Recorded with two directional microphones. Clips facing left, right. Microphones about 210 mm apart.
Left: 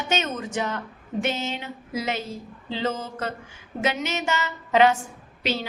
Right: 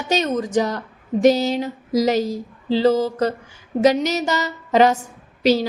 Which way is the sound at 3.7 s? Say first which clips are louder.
Right 10 dB; 40° right (ahead or behind).